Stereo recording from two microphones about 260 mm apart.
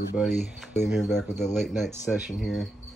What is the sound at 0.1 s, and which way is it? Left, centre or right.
Speech, centre.